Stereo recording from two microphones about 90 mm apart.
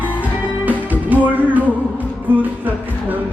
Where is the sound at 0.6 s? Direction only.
20° right (ahead or behind).